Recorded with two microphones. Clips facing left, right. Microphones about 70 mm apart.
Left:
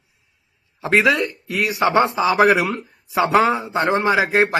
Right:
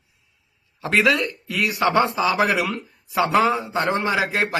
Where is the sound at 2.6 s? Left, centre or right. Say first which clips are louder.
Left 3 dB; left.